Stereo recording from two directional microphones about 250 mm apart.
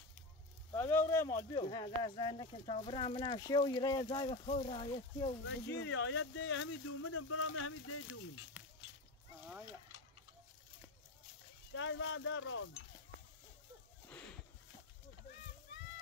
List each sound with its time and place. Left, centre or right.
0.7 s speech: centre
5.4 s speech: left
11.7 s speech: left